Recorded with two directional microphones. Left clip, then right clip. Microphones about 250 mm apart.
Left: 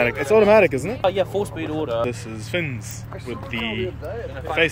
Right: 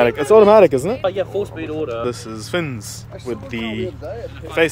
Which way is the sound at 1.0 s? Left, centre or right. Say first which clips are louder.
Even; left.